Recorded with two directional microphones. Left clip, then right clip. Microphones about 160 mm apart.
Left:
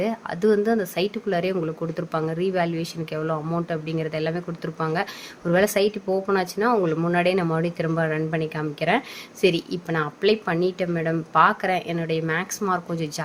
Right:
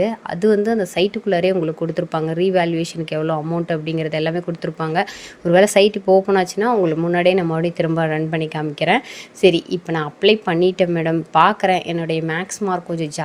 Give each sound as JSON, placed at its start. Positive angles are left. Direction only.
{"t": 0.0, "sound": "speech", "side_deg": -20}